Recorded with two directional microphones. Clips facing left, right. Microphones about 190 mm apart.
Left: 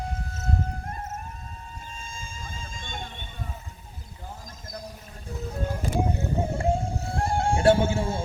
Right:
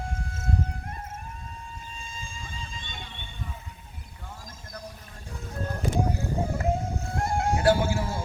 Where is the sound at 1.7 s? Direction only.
45° left (ahead or behind).